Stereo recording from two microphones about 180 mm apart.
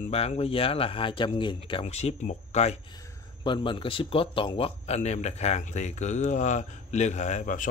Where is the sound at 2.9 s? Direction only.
25° left (ahead or behind); by 7.7 s 45° left (ahead or behind).